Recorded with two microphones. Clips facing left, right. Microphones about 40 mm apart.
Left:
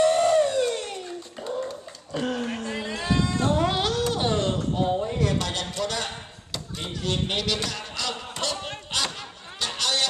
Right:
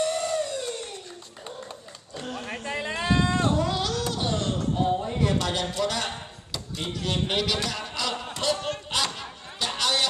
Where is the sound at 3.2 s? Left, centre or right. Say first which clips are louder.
Left 1 dB; right.